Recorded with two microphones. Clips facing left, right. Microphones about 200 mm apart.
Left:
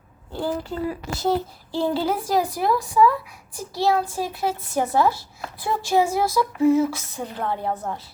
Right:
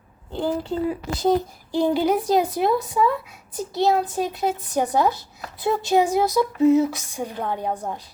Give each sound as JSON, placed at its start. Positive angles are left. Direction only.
{"t": 0.3, "sound": "a child's voice", "side_deg": -20}